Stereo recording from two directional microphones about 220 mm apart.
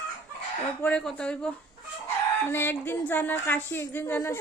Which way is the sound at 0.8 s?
5° left (ahead or behind).